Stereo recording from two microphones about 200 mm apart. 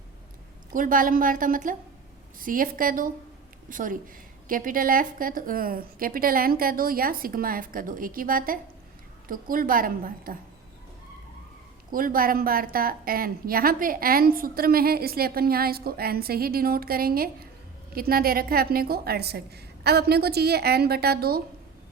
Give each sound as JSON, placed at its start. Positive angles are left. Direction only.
{"t": 0.7, "sound": "a woman's voice", "side_deg": -40}
{"t": 11.9, "sound": "a woman's voice", "side_deg": -45}